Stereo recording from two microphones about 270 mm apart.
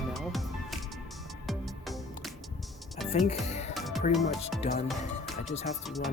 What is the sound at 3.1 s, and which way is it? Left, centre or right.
Speech, left.